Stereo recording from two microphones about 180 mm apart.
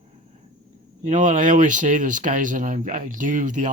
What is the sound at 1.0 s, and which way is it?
Speech, 45° right (ahead or behind).